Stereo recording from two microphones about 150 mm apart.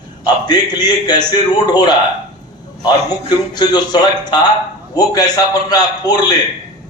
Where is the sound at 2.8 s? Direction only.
25° left (ahead or behind).